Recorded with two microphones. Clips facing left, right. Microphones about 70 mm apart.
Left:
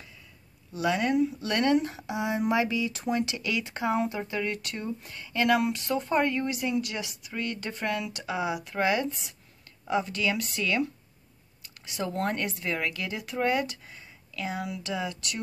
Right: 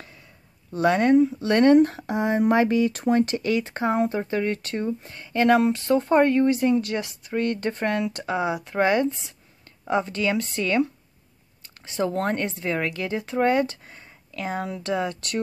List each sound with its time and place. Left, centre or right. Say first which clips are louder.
0.7 s speech: right 7 dB; right